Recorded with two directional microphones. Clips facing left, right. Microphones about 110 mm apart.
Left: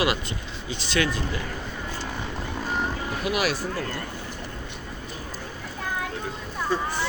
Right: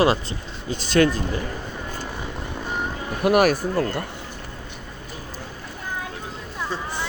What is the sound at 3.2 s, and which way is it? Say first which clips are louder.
Speech: right 10 dB; 55° right (ahead or behind).